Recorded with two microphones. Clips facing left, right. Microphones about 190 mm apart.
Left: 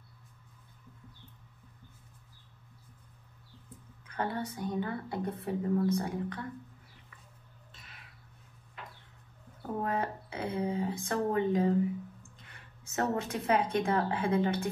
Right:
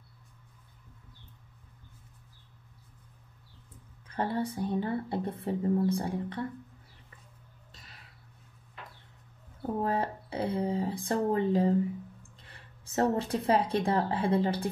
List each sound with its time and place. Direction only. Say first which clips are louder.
4.1 s speech: right 4 dB; 30° right (ahead or behind)
7.7 s a sound: right 1 dB; 35° right (ahead or behind)
9.8 s a woman's voice: right 2 dB; 30° right (ahead or behind)